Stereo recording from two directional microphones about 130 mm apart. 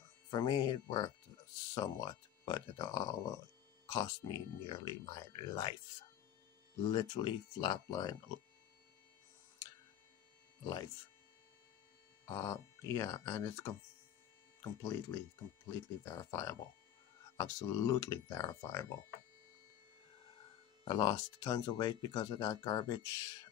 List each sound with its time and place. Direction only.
0.3 s speech: 30° left (ahead or behind)
6.8 s speech: 35° left (ahead or behind)
10.6 s speech: 30° left (ahead or behind)
12.3 s speech: 20° left (ahead or behind)
20.8 s speech: 30° left (ahead or behind)